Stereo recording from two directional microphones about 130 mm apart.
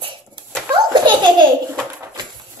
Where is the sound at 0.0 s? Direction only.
40° right (ahead or behind).